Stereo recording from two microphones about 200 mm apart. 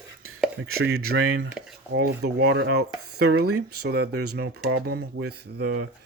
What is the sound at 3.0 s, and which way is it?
Speech, 90° right.